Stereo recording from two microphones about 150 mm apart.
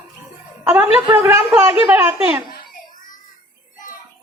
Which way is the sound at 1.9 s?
15° right (ahead or behind).